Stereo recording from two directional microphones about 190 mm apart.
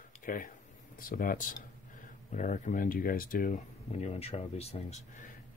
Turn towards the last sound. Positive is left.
turn(degrees=35)  # may be behind; listen again after turning